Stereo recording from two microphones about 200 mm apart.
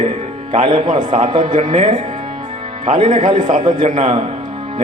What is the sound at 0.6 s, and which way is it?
Speech, 20° right (ahead or behind).